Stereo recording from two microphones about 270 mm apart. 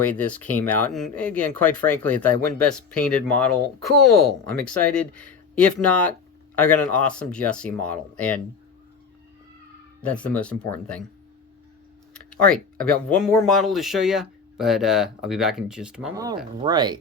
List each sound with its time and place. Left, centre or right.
0.2 s speech: centre
10.0 s speech: centre
12.1 s speech: centre
16.6 s speech: centre